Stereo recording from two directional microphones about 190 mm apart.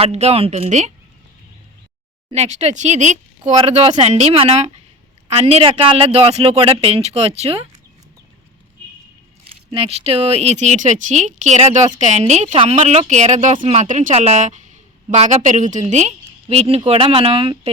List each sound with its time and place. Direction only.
0.0 s speech: 35° right (ahead or behind)
2.3 s speech: 35° right (ahead or behind)
9.7 s speech: 30° right (ahead or behind)